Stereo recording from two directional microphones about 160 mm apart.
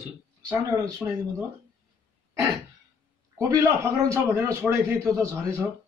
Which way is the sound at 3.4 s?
20° right (ahead or behind).